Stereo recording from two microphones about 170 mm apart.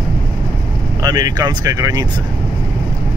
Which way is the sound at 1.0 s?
20° right (ahead or behind).